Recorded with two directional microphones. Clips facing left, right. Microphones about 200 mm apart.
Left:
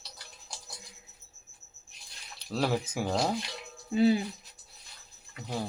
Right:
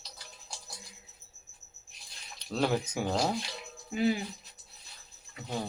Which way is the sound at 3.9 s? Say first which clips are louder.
Left 5 dB; 30° left (ahead or behind).